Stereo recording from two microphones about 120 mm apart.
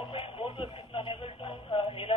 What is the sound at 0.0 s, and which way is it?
Radio, 45° left (ahead or behind).